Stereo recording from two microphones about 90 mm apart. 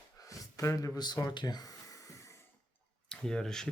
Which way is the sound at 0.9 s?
50° left (ahead or behind).